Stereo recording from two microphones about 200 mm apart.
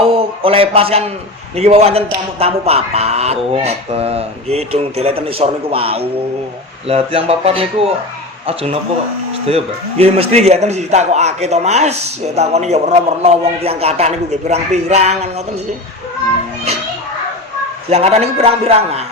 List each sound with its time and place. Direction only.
0.0 s a man's voice: 30° right (ahead or behind)
17.8 s a man's voice: 30° right (ahead or behind)